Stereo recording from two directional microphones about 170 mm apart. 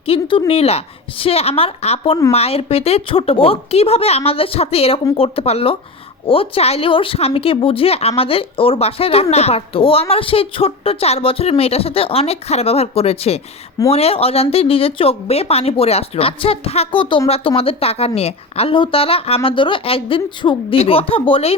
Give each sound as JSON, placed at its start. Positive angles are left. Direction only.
{"t": 0.0, "sound": "speech", "side_deg": 35}